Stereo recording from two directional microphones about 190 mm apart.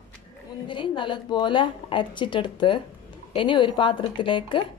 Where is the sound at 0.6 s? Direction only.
25° left (ahead or behind).